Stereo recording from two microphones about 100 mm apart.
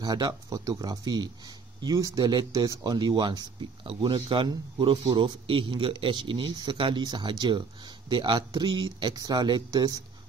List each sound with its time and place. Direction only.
0.0 s speech: 40° right (ahead or behind)